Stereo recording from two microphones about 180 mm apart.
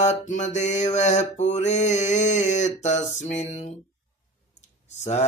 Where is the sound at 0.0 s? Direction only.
40° left (ahead or behind).